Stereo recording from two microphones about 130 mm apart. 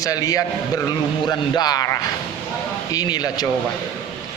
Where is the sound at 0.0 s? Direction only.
25° left (ahead or behind).